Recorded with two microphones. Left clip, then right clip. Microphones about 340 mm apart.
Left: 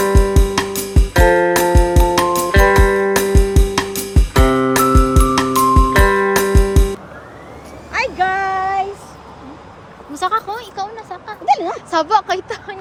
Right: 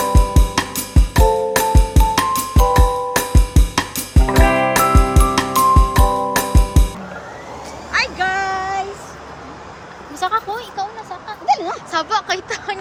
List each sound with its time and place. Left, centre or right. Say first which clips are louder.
0.0 s music: left 3 dB; centre
7.9 s child singing: left 1 dB; centre
10.2 s a sound: left 1 dB; centre